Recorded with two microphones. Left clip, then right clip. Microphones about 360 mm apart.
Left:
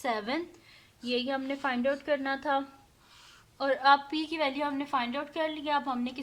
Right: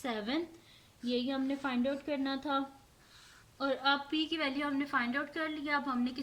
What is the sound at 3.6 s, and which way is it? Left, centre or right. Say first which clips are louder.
A woman's voice: left 8 dB; centre.